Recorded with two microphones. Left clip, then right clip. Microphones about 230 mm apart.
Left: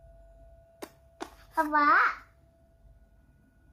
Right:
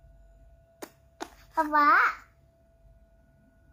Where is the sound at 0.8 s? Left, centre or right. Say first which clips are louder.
Right 1 dB; centre.